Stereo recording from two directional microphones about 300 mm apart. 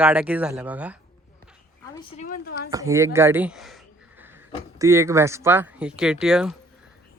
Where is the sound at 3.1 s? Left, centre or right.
Centre.